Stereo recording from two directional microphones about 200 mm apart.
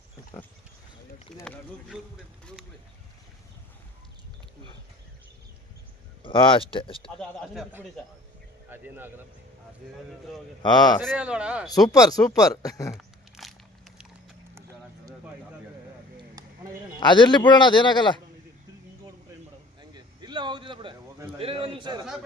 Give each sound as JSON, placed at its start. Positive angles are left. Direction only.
{"t": 1.3, "sound": "speech", "side_deg": 0}
{"t": 6.2, "sound": "a man's voice", "side_deg": 25}
{"t": 7.2, "sound": "speech", "side_deg": 0}
{"t": 10.6, "sound": "a man's voice", "side_deg": 20}
{"t": 11.0, "sound": "speech", "side_deg": 0}
{"t": 11.7, "sound": "speech", "side_deg": 20}
{"t": 12.9, "sound": "a sound", "side_deg": 0}
{"t": 16.4, "sound": "a sound", "side_deg": -15}
{"t": 17.0, "sound": "a man's voice", "side_deg": 25}
{"t": 19.9, "sound": "a sound", "side_deg": -20}